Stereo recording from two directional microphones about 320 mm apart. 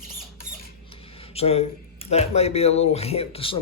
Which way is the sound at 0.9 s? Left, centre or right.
Centre.